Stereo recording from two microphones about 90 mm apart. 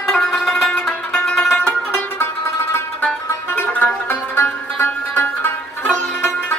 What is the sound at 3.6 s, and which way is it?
Music, 20° left (ahead or behind).